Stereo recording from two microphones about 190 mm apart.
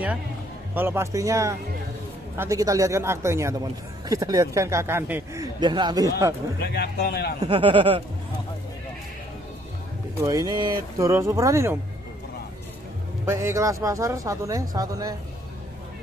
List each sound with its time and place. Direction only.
0.7 s speech: 15° right (ahead or behind)
6.6 s speech: 60° left (ahead or behind)
7.3 s speech: 30° right (ahead or behind)
10.2 s speech: 20° right (ahead or behind)
13.2 s speech: 15° right (ahead or behind)